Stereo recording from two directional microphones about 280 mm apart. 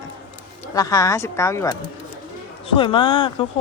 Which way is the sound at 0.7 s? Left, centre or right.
Centre.